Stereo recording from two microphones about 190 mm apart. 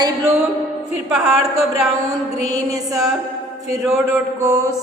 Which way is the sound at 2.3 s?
20° right (ahead or behind).